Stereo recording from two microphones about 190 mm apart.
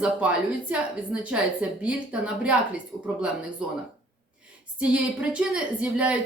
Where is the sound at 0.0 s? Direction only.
5° right (ahead or behind).